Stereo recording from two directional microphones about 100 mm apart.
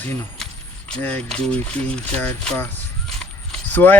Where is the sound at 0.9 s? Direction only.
15° left (ahead or behind).